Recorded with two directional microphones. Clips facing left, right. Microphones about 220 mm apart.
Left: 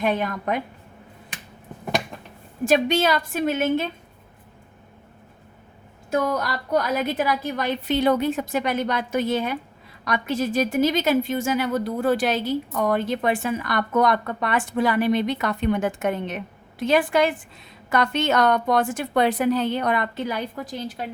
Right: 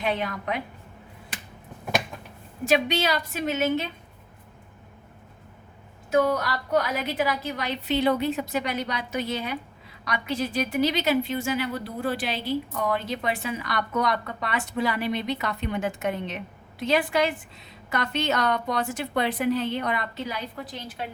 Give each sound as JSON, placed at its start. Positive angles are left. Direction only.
{"t": 0.0, "sound": "a woman's voice", "side_deg": 45}
{"t": 2.6, "sound": "a woman's voice", "side_deg": 45}
{"t": 6.1, "sound": "a woman's voice", "side_deg": 45}